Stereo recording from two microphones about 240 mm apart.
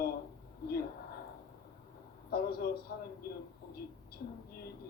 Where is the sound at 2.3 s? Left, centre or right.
Left.